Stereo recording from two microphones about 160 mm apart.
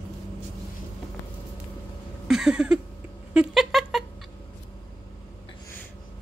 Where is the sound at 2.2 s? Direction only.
5° right (ahead or behind).